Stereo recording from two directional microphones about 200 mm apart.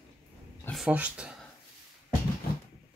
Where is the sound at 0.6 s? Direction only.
Centre (ahead or behind).